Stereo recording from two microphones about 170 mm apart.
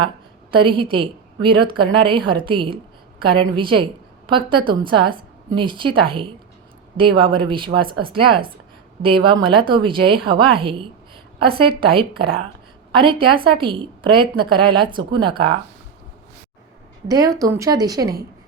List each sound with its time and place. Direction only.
0.5 s a woman's voice: 30° right (ahead or behind)
17.1 s a woman's voice: 20° right (ahead or behind)